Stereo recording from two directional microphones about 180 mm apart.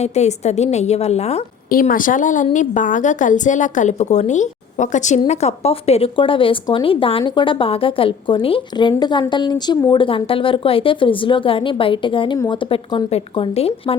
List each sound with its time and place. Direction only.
0.0 s a woman's voice: 40° left (ahead or behind)
1.7 s a woman's voice: 50° left (ahead or behind); by 13.9 s 35° left (ahead or behind)